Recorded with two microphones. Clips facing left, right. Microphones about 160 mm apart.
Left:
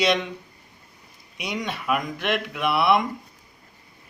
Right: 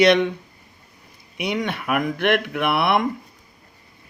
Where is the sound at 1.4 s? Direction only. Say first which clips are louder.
Right 5 dB; 55° right (ahead or behind).